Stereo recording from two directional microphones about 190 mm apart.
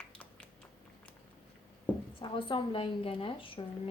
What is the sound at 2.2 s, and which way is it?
A woman's voice, 25° left (ahead or behind).